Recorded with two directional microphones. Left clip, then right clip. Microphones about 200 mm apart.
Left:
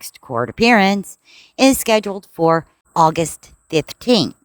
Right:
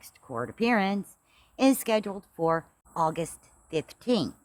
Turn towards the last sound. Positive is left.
turn(degrees=45)  # may be behind; listen again after turning